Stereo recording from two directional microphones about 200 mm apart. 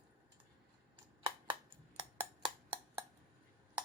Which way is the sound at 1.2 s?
25° right (ahead or behind).